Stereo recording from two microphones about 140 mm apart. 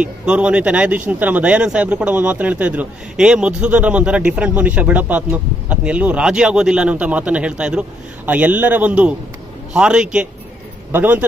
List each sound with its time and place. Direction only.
0.0 s speech: 10° right (ahead or behind)